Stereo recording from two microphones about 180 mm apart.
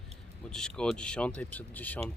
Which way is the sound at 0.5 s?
5° left (ahead or behind).